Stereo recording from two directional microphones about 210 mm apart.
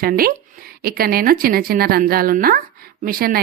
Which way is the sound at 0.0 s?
45° right (ahead or behind).